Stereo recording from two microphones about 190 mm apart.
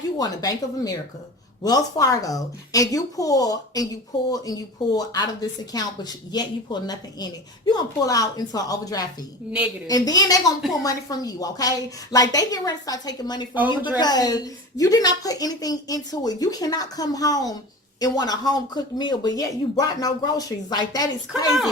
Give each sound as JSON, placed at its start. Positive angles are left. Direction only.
{"t": 0.2, "sound": "speech", "side_deg": 20}